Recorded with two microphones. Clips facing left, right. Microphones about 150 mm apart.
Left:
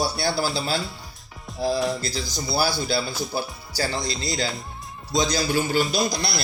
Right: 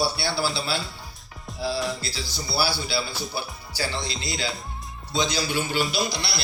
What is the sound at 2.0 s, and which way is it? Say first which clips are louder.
A man's voice: left 4 dB; 45° left (ahead or behind).